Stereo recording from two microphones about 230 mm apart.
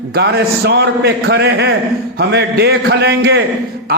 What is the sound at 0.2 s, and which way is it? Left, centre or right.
A man's voice, right.